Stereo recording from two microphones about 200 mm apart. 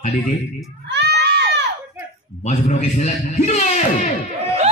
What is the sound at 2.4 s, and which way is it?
A man's voice, 35° left (ahead or behind).